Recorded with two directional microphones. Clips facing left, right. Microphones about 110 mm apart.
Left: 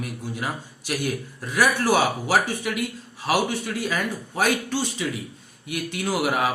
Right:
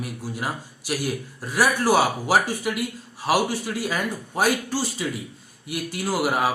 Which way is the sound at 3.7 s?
20° right (ahead or behind).